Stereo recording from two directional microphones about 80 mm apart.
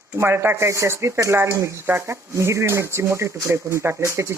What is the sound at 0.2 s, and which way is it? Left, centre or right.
Speech, right.